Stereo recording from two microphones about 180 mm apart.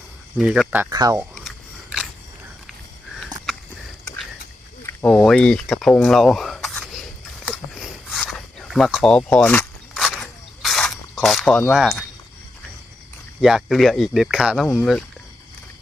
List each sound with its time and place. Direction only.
0.3 s speech: centre (ahead or behind)
0.9 s speech: 20° right (ahead or behind)
1.4 s a sound: 5° right (ahead or behind)
4.9 s speech: 5° left (ahead or behind)
7.4 s a sound: centre (ahead or behind)
11.7 s speech: centre (ahead or behind)
13.4 s speech: centre (ahead or behind)